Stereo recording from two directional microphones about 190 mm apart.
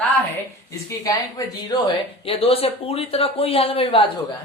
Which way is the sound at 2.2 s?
30° left (ahead or behind).